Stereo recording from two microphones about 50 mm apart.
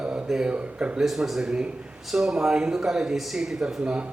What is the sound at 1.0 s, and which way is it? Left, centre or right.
Speech, centre.